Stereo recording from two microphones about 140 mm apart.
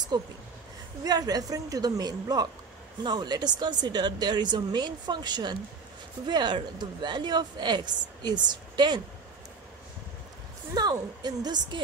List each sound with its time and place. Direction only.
0.1 s a woman's voice: 30° right (ahead or behind)
10.7 s a woman's voice: 30° right (ahead or behind)